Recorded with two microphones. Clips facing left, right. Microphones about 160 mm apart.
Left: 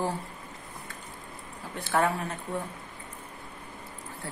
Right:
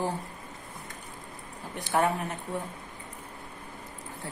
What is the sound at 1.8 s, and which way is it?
Speech, 15° right (ahead or behind).